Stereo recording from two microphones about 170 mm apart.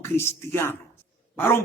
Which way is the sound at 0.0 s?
15° left (ahead or behind).